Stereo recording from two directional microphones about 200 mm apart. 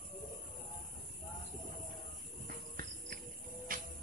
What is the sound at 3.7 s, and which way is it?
Music, 45° right (ahead or behind).